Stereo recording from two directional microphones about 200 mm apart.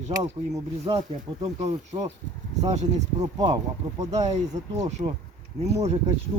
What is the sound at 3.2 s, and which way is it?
Speech, 20° right (ahead or behind).